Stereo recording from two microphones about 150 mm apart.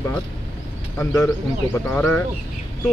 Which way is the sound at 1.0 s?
15° left (ahead or behind).